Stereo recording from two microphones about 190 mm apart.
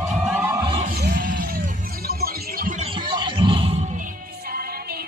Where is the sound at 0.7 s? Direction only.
40° right (ahead or behind).